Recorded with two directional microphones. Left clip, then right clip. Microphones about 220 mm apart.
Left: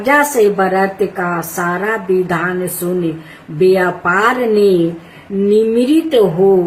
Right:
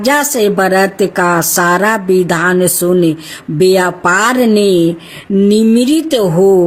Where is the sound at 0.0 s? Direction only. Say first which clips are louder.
Even; 55° right (ahead or behind).